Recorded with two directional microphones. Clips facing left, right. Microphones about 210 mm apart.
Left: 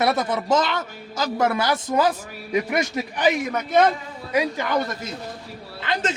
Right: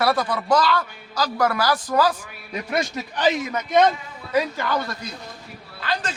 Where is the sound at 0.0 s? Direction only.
20° left (ahead or behind).